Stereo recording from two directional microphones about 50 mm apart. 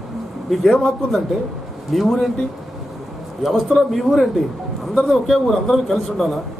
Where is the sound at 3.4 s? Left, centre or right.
Centre.